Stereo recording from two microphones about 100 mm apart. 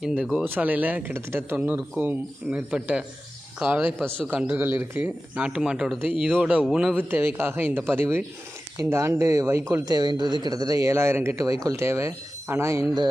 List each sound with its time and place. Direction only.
0.0 s speech: 10° right (ahead or behind)
6.9 s speech: 20° right (ahead or behind)
9.8 s speech: 40° right (ahead or behind)